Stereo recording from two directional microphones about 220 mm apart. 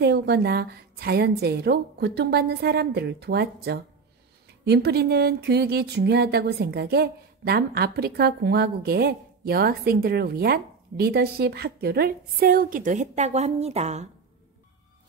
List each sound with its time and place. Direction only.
0.0 s speech: 45° right (ahead or behind); by 14.0 s 30° right (ahead or behind)